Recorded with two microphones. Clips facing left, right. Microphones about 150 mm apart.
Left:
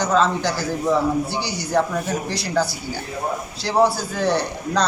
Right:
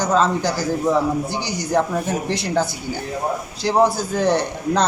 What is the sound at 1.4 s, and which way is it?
Speech, 45° right (ahead or behind).